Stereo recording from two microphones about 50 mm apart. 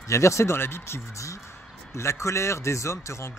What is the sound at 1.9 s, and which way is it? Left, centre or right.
A man's voice, left.